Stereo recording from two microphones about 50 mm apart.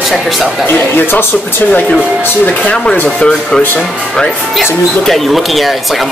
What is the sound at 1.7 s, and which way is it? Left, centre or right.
Speech, left.